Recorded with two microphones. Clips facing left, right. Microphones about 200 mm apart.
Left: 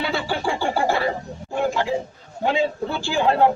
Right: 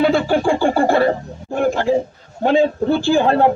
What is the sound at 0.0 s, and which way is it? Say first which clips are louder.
Music: right 9 dB; 50° right (ahead or behind).